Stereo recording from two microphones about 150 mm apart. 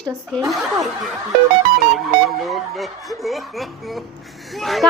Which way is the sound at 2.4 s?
Centre (ahead or behind).